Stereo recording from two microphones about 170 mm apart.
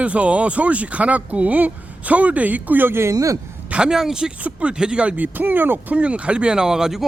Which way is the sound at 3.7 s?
5° right (ahead or behind).